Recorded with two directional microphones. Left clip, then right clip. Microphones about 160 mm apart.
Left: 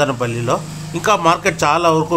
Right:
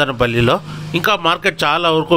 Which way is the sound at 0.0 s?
35° right (ahead or behind).